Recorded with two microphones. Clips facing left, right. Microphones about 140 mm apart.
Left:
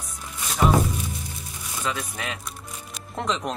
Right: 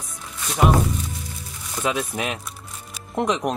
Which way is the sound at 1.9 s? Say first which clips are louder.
Right 6 dB; 20° right (ahead or behind).